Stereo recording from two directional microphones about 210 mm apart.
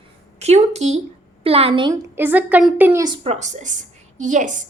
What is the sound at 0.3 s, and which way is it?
A woman's voice, 30° right (ahead or behind).